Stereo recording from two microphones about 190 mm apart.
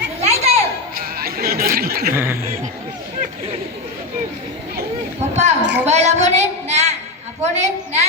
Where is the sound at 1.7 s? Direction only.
50° right (ahead or behind).